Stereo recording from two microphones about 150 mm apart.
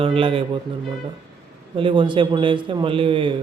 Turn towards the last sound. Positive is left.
turn(degrees=-35)  # may be behind; listen again after turning